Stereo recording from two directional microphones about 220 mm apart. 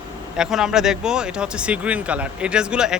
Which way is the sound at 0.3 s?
Centre (ahead or behind).